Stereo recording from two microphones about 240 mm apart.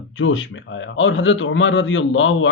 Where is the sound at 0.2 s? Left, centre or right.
Left.